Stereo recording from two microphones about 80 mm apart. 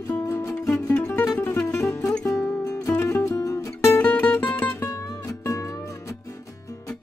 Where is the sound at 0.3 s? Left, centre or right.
Left.